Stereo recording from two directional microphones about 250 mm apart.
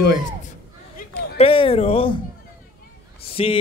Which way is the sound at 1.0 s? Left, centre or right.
Left.